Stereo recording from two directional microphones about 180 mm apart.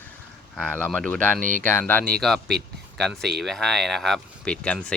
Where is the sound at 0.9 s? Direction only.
5° left (ahead or behind).